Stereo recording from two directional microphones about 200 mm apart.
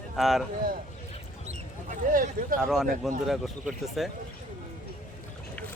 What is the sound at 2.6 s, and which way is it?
Speech, centre (ahead or behind).